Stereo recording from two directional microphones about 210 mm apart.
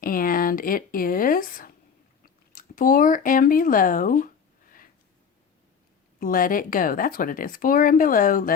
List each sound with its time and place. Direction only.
0.0 s speech: 40° left (ahead or behind)
6.1 s a woman's voice: 40° left (ahead or behind)